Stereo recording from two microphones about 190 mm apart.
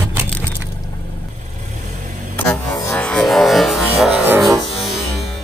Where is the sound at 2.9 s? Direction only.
5° left (ahead or behind).